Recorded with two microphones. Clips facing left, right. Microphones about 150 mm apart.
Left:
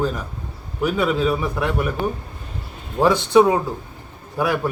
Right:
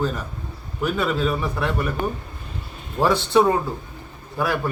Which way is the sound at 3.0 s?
10° left (ahead or behind).